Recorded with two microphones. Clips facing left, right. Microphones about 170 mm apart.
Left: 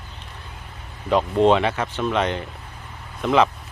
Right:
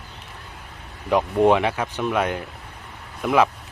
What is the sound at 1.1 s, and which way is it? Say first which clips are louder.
Speech: even; 15° right (ahead or behind).